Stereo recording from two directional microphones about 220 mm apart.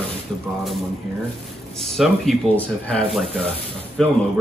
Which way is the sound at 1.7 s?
Centre (ahead or behind).